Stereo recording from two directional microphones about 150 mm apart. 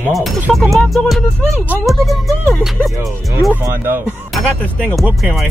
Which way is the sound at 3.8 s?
15° right (ahead or behind).